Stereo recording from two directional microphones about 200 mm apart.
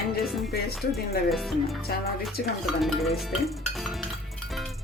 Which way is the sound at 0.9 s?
Centre (ahead or behind).